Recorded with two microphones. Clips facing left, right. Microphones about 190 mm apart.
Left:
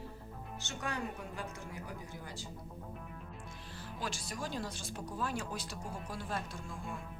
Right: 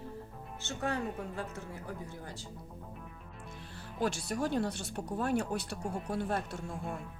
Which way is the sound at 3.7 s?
60° right (ahead or behind).